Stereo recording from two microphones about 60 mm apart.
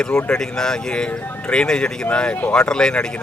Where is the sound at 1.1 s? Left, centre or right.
Left.